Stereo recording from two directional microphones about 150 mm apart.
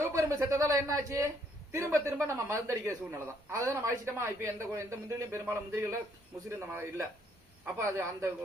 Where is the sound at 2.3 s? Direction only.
20° right (ahead or behind).